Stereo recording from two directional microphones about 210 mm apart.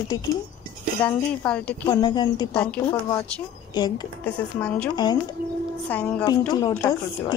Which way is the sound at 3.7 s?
20° left (ahead or behind).